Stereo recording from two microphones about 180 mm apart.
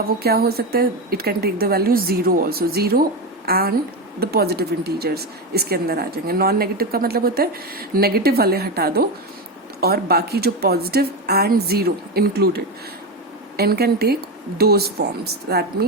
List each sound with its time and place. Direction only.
0.2 s speech: 60° right (ahead or behind)